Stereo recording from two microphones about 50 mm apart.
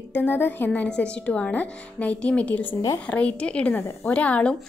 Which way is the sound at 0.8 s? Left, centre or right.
Left.